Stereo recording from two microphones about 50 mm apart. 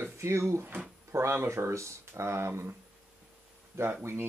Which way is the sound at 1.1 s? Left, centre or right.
Right.